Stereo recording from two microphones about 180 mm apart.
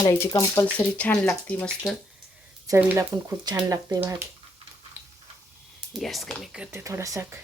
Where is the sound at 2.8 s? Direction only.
10° right (ahead or behind).